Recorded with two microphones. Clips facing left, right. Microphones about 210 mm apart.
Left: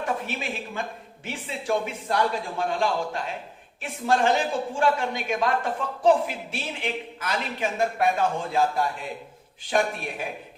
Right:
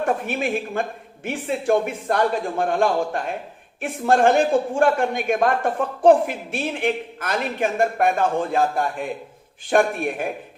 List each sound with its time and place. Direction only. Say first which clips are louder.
0.0 s a man's voice: right 7 dB; 55° right (ahead or behind)